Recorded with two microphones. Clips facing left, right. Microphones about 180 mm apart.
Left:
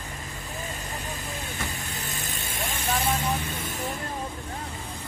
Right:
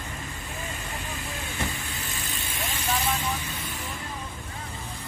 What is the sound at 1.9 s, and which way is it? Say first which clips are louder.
Vehicle: left 1 dB; 45° left (ahead or behind).